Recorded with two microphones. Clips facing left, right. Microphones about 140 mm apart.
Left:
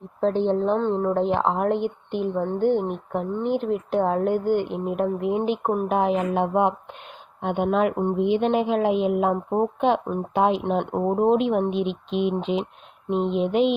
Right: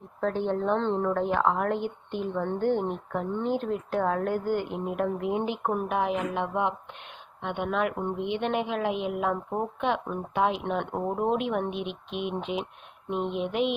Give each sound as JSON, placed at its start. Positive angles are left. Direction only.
{"t": 0.2, "sound": "a woman's voice", "side_deg": 25}
{"t": 0.8, "sound": "a woman's voice", "side_deg": 10}
{"t": 1.0, "sound": "a woman's voice", "side_deg": 20}
{"t": 5.9, "sound": "a woman's voice", "side_deg": 35}
{"t": 10.6, "sound": "a woman's voice", "side_deg": 20}